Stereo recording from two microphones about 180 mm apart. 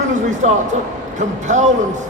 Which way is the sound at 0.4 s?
40° right (ahead or behind).